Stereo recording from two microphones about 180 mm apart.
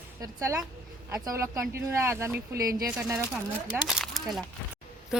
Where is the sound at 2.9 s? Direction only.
5° right (ahead or behind).